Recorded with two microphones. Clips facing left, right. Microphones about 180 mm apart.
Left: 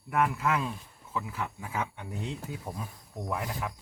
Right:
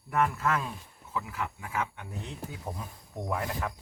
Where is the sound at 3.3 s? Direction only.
5° left (ahead or behind).